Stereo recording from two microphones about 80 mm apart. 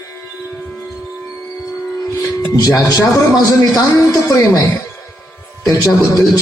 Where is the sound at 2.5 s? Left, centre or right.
Left.